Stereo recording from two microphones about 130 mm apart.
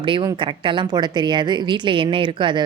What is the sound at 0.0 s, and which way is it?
Speech, 40° right (ahead or behind).